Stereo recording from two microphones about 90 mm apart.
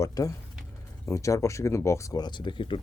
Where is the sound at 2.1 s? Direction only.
55° left (ahead or behind).